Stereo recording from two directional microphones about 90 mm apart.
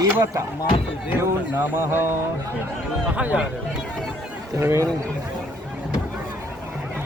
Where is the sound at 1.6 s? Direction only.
25° right (ahead or behind).